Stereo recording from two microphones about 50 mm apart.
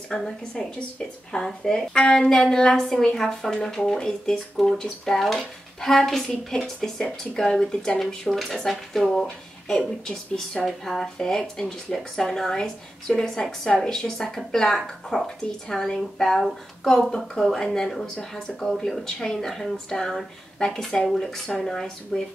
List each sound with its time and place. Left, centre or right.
0.1 s a woman's voice: centre
10.6 s a woman's voice: centre